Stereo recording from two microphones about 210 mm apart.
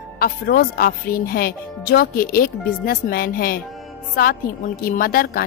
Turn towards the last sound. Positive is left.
turn(degrees=45)  # may be behind; listen again after turning